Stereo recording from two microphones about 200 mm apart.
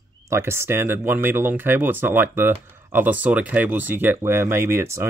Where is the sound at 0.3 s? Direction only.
10° right (ahead or behind).